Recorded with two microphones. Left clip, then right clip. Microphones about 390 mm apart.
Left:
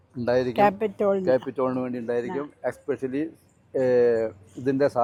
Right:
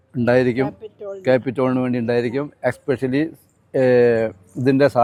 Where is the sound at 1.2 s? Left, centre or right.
Right.